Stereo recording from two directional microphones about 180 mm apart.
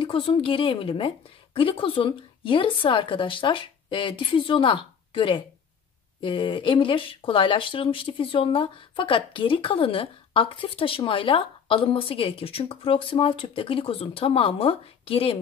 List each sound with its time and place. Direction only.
0.0 s speech: 30° left (ahead or behind)